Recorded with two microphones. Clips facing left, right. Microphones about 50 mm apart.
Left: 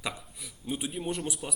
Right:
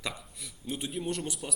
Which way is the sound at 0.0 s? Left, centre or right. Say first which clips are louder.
Left 1 dB; centre.